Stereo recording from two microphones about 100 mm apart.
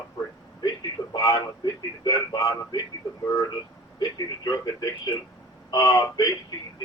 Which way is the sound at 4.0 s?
40° left (ahead or behind).